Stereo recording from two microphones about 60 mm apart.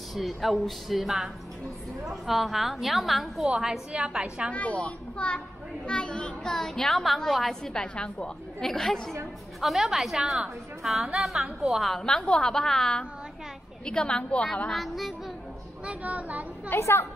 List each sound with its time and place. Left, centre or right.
0.1 s a woman's voice: centre
3.4 s a woman's voice: centre
4.5 s a woman's voice: left; by 7.8 s centre
7.8 s a child's voice: centre
11.9 s a child's voice: centre
14.7 s a woman's voice: centre
15.8 s speech: right
16.7 s a woman's voice: left